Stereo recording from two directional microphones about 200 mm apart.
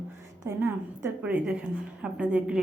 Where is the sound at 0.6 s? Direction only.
10° right (ahead or behind).